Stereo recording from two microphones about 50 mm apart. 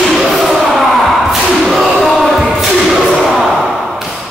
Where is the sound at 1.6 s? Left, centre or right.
Centre.